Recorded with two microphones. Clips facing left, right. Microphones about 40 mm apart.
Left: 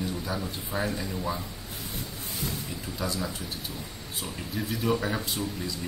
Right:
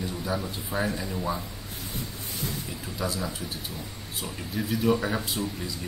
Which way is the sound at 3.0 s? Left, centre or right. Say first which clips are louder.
Right 1 dB; centre.